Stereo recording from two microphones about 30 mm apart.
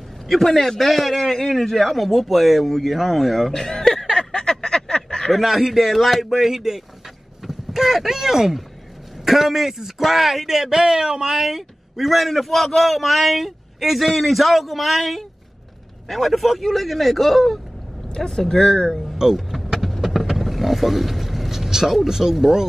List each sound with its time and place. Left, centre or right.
0.3 s a man's voice: centre
3.5 s a sound: centre
5.3 s a man's voice: centre
7.7 s a man's voice: centre
18.2 s speech: centre
19.3 s power windows: centre
20.0 s vehicle: centre
22.0 s speech: centre